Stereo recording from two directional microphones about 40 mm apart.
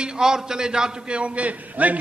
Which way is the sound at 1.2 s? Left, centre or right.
Right.